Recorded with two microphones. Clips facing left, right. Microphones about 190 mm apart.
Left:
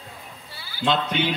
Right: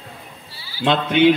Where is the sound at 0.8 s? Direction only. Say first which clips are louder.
Right 8 dB; 55° right (ahead or behind).